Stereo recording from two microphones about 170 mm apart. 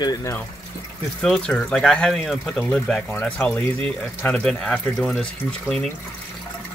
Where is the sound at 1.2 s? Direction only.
5° left (ahead or behind).